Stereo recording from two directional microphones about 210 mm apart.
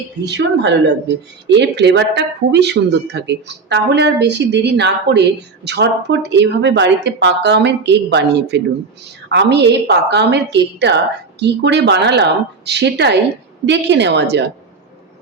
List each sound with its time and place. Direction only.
0.3 s a woman's voice: 55° right (ahead or behind)